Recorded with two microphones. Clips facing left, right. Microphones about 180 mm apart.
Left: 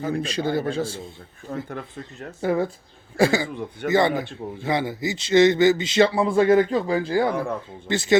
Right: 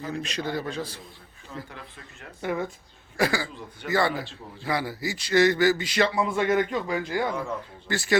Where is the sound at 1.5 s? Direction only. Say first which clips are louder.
Left 8 dB; 50° left (ahead or behind).